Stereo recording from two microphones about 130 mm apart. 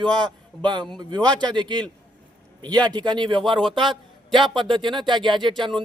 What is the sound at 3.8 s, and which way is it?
Speech, centre (ahead or behind).